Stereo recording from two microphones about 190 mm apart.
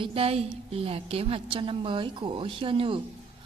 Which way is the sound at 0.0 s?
30° right (ahead or behind).